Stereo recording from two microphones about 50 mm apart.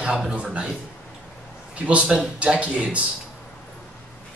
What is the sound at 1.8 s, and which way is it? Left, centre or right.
A man's voice, right.